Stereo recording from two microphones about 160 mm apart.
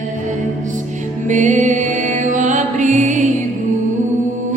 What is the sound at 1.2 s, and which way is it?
Music, 50° right (ahead or behind).